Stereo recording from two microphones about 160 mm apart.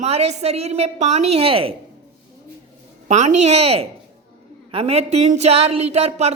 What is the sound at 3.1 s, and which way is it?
A woman's voice, 45° right (ahead or behind).